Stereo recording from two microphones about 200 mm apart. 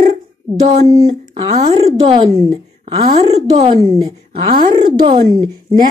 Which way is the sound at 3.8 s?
20° right (ahead or behind).